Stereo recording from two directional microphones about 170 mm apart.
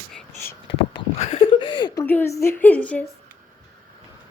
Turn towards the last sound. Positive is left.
turn(degrees=10)  # may be behind; listen again after turning